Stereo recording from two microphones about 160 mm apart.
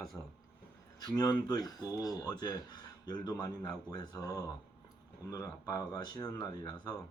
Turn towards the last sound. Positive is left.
turn(degrees=25)  # may be behind; listen again after turning